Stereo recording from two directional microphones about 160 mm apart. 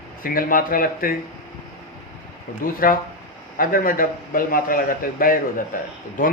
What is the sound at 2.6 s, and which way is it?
A man's voice, 60° left (ahead or behind).